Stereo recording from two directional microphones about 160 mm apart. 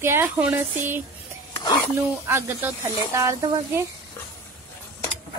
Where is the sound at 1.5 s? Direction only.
25° left (ahead or behind).